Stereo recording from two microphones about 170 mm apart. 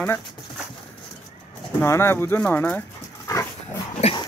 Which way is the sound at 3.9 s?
35° left (ahead or behind).